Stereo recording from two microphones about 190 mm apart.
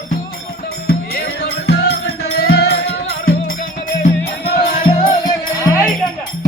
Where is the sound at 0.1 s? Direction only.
50° left (ahead or behind).